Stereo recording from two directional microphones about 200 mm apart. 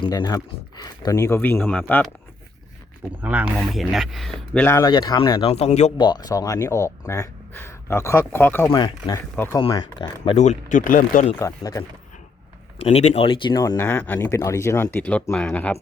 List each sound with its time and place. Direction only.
0.0 s speech: 20° left (ahead or behind)
3.2 s speech: 10° right (ahead or behind); by 5.9 s 35° left (ahead or behind)
6.0 s speech: 20° left (ahead or behind)
8.7 s speech: 25° left (ahead or behind)
9.3 s speech: 10° left (ahead or behind)
9.6 s speech: 25° left (ahead or behind)
10.3 s speech: 35° left (ahead or behind)
11.3 s speech: 15° left (ahead or behind)
12.8 s speech: 30° left (ahead or behind); by 15.8 s 5° left (ahead or behind)